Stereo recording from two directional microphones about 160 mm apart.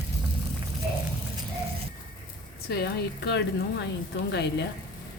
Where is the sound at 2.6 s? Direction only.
90° left.